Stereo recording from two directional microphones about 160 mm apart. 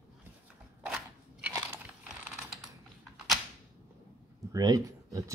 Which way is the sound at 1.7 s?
5° right (ahead or behind).